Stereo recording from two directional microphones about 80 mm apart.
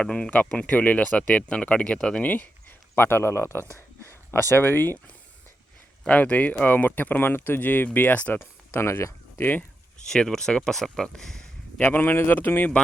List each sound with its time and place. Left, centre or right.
0.0 s speech: centre
10.1 s speech: centre
11.8 s speech: left